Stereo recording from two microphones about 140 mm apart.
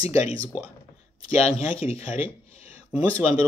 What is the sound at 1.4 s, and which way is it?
Speech, 40° left (ahead or behind).